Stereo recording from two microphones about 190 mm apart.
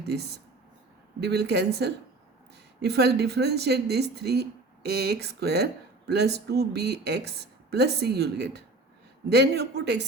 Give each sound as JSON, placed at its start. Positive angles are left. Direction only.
{"t": 0.0, "sound": "a woman's voice", "side_deg": -60}